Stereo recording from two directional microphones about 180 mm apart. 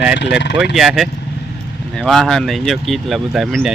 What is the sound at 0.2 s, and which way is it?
Speech, 75° left (ahead or behind).